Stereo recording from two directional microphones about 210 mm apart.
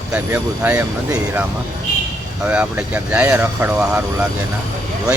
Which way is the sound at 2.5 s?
5° right (ahead or behind).